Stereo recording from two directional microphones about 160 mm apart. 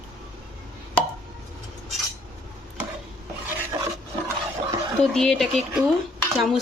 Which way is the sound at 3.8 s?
20° right (ahead or behind).